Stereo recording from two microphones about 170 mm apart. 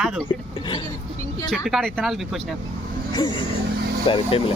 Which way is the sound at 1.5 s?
Centre (ahead or behind).